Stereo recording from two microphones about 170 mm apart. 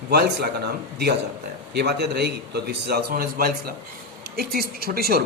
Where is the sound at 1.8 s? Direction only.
75° right (ahead or behind).